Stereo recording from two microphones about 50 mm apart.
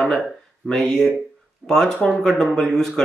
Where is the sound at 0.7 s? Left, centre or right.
Centre.